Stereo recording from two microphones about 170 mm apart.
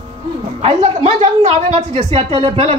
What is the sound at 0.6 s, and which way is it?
A man's voice, 40° right (ahead or behind).